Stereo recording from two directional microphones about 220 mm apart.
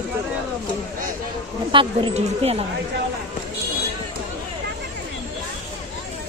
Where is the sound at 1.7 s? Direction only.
25° right (ahead or behind).